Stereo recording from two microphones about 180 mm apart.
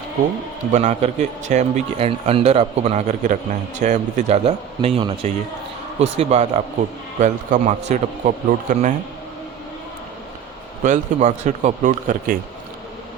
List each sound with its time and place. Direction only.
0.7 s a man's voice: 40° right (ahead or behind)
10.8 s speech: 45° right (ahead or behind)